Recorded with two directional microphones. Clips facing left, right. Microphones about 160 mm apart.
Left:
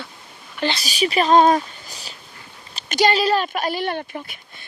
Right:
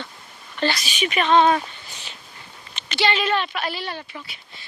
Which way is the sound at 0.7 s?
35° left (ahead or behind).